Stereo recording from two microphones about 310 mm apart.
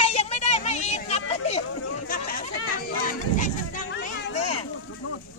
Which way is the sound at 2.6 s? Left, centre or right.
Left.